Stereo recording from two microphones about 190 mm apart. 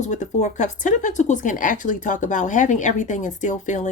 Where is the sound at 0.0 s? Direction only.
40° left (ahead or behind).